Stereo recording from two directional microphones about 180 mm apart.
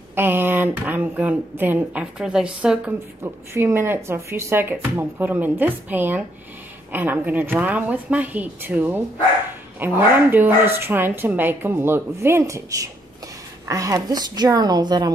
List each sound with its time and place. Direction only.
0.1 s a woman's voice: 10° right (ahead or behind)